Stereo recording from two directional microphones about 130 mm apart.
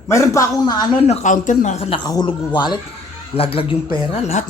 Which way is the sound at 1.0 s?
55° left (ahead or behind).